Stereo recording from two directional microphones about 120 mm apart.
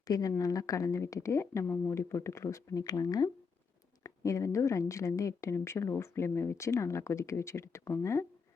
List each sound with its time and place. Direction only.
0.0 s speech: 30° left (ahead or behind)